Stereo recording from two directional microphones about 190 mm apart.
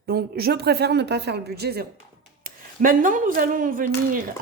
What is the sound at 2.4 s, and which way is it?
Speech, 45° right (ahead or behind).